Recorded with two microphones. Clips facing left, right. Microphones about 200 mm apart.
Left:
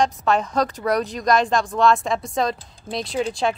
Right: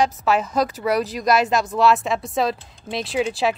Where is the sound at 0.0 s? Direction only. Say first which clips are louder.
Even; 5° right (ahead or behind).